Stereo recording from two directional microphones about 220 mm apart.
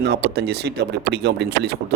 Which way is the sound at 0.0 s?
50° right (ahead or behind).